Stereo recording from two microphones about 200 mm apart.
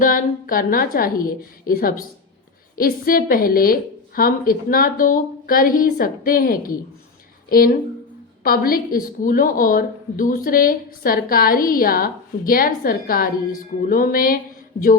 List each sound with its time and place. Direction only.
0.0 s a woman's voice: 45° left (ahead or behind)